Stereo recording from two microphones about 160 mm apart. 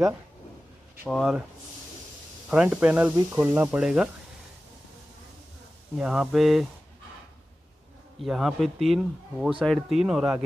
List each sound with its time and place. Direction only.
1.0 s speech: centre (ahead or behind)
2.5 s speech: 5° right (ahead or behind)
5.9 s speech: 5° right (ahead or behind)
8.2 s speech: centre (ahead or behind)